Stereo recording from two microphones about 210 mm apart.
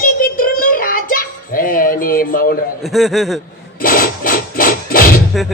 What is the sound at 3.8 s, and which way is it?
Rub, 45° left (ahead or behind).